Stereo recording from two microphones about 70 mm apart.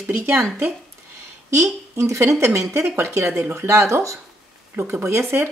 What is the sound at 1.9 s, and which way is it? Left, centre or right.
Speech, right.